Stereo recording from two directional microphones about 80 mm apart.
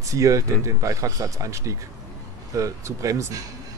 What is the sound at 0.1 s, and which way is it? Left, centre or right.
Speech, right.